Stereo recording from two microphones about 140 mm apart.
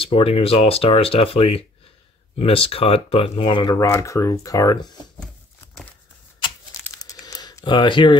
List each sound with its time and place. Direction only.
0.0 s speech: 40° left (ahead or behind)
3.7 s speech: 20° left (ahead or behind)
7.0 s coin: 25° left (ahead or behind)